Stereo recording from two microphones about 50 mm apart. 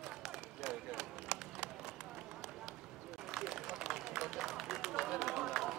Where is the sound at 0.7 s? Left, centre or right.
Centre.